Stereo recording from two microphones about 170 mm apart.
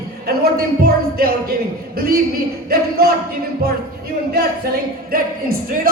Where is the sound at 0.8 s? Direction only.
60° right (ahead or behind).